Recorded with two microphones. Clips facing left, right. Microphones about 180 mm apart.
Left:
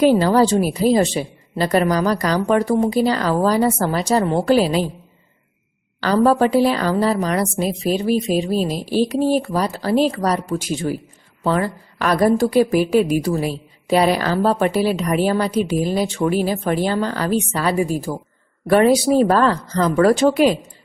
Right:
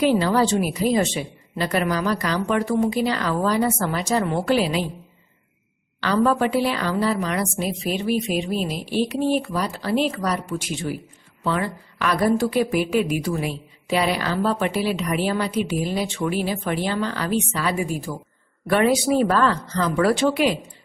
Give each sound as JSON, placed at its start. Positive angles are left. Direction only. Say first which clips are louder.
{"t": 0.0, "sound": "a woman's voice", "louder": "left 5 dB", "side_deg": 40}
{"t": 6.0, "sound": "a woman's voice", "louder": "left 4 dB", "side_deg": 40}